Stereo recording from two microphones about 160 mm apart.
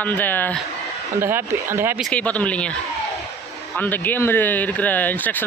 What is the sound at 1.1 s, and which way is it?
Speech, 15° right (ahead or behind).